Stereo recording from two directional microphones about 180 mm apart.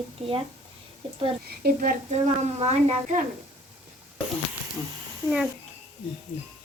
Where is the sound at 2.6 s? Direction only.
35° right (ahead or behind).